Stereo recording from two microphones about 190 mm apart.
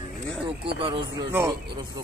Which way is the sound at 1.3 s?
10° right (ahead or behind).